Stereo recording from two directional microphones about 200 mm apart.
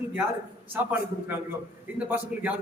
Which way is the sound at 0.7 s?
10° right (ahead or behind).